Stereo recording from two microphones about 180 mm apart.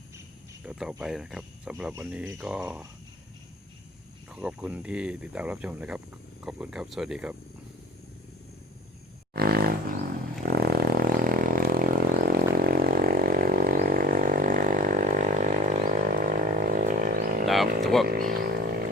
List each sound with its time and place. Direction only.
0.6 s speech: 5° right (ahead or behind)
4.3 s speech: 5° right (ahead or behind)
9.3 s roaring cats: 60° right (ahead or behind)
10.4 s vehicle: 60° right (ahead or behind)
17.4 s roaring cats: centre (ahead or behind)
18.0 s a sound: 55° right (ahead or behind)